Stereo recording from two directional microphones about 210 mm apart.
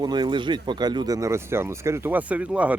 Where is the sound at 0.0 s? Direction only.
20° right (ahead or behind).